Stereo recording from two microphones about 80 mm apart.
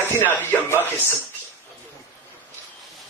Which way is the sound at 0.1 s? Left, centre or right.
Left.